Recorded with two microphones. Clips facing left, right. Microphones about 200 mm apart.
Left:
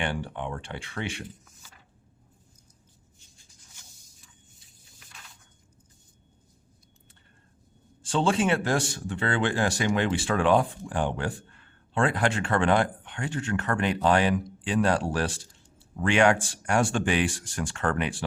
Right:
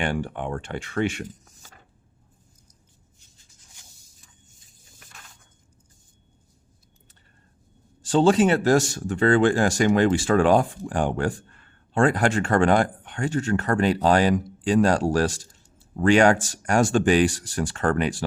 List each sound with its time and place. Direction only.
0.0 s speech: 45° right (ahead or behind)
4.6 s snake: 45° right (ahead or behind)
8.0 s speech: 40° right (ahead or behind)